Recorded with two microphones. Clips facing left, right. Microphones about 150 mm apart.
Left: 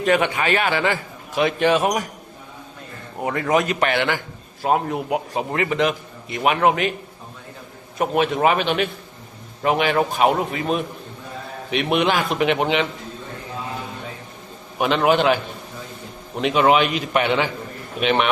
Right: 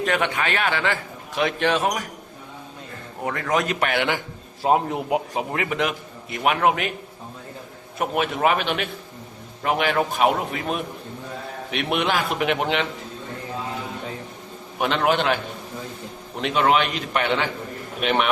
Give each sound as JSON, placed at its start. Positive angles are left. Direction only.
{"t": 0.0, "sound": "a man's voice", "side_deg": 5}
{"t": 3.2, "sound": "a man's voice", "side_deg": 10}
{"t": 4.6, "sound": "a man's voice", "side_deg": -20}
{"t": 5.5, "sound": "a man's voice", "side_deg": -5}
{"t": 7.9, "sound": "a man's voice", "side_deg": 0}
{"t": 14.8, "sound": "a man's voice", "side_deg": 5}
{"t": 16.4, "sound": "a man's voice", "side_deg": 5}